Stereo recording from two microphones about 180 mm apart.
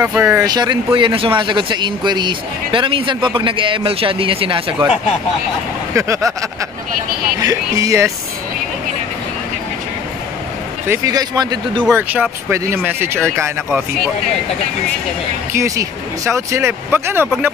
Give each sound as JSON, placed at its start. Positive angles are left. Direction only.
{"t": 0.0, "sound": "speech", "side_deg": -10}
{"t": 5.9, "sound": "speech", "side_deg": -15}
{"t": 7.3, "sound": "speech", "side_deg": -20}
{"t": 10.9, "sound": "speech", "side_deg": -20}
{"t": 11.8, "sound": "speech", "side_deg": -10}
{"t": 15.5, "sound": "speech", "side_deg": -15}